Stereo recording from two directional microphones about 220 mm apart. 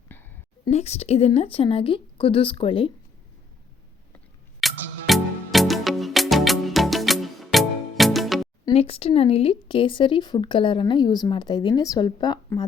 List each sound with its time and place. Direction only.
0.1 s a sound: 10° left (ahead or behind)
0.6 s speech: 30° left (ahead or behind)
4.6 s music: centre (ahead or behind)
8.6 s speech: 25° left (ahead or behind)